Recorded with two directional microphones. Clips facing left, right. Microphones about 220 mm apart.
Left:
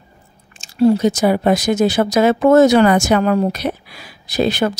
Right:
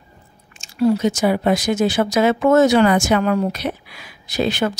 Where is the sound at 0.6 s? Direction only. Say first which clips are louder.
Left 4 dB; 30° left (ahead or behind).